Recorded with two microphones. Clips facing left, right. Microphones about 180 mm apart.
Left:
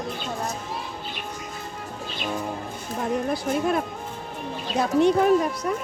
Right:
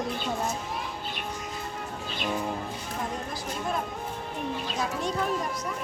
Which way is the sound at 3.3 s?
65° left (ahead or behind).